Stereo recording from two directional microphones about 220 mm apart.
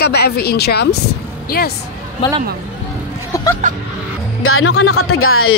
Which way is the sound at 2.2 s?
20° left (ahead or behind).